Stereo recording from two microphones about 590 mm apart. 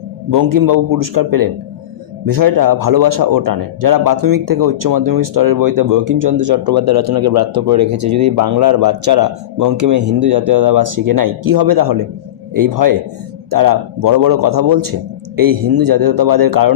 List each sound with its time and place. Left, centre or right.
0.3 s speech: right